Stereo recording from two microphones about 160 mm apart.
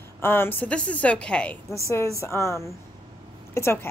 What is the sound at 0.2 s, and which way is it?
A woman's voice, 15° left (ahead or behind).